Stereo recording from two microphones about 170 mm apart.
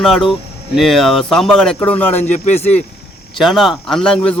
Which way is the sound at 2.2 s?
45° left (ahead or behind).